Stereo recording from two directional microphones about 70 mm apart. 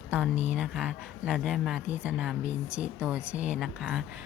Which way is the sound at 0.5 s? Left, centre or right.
Centre.